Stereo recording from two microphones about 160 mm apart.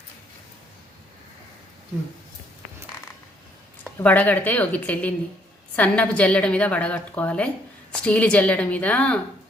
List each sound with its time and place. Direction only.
3.8 s a woman's voice: 10° left (ahead or behind)